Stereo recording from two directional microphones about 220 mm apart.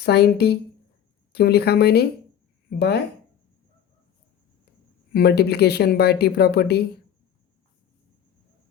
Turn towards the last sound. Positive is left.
turn(degrees=50)  # may be behind; listen again after turning